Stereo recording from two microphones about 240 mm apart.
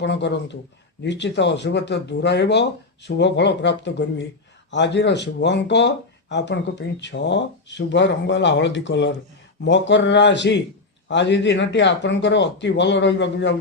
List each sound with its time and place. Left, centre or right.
0.0 s speech: left